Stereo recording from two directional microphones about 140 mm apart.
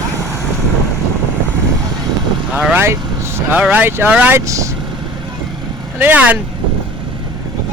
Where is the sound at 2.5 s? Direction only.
5° right (ahead or behind).